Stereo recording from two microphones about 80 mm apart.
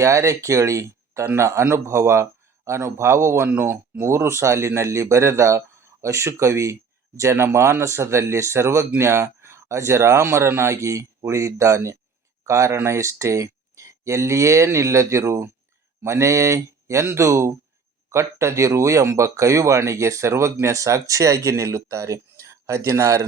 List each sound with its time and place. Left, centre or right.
0.0 s speech: right